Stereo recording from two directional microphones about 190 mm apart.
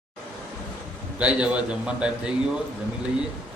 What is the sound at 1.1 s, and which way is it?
A man's voice, 5° right (ahead or behind).